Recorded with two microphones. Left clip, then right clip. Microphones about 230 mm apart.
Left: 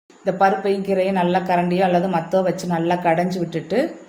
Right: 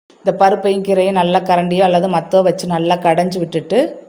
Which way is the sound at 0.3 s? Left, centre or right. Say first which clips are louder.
Right 6 dB; right.